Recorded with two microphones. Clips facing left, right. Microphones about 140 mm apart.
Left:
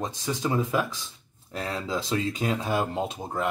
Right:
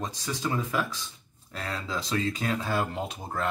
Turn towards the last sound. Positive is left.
turn(degrees=20)  # may be behind; listen again after turning